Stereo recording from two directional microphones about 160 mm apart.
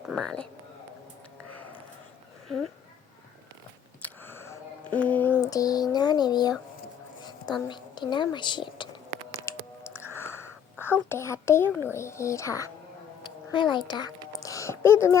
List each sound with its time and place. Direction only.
0.2 s speech: 5° left (ahead or behind)
2.5 s speech: 5° left (ahead or behind)
4.0 s a sound: 15° left (ahead or behind)
4.9 s speech: 10° left (ahead or behind); by 8.9 s 30° left (ahead or behind)
9.5 s whispering: 15° left (ahead or behind)
13.2 s speech: 30° left (ahead or behind)
14.3 s a sound: 20° left (ahead or behind)